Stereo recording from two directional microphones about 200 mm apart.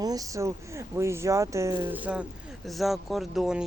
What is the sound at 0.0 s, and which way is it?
Speech, 20° right (ahead or behind).